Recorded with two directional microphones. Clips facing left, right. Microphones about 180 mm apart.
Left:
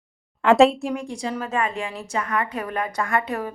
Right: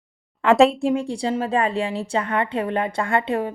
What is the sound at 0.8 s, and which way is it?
A woman's voice, 30° right (ahead or behind).